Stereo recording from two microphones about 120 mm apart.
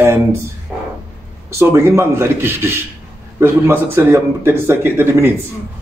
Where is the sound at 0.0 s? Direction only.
20° right (ahead or behind).